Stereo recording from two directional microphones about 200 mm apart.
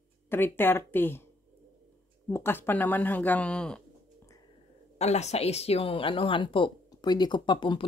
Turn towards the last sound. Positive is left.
turn(degrees=25)  # may be behind; listen again after turning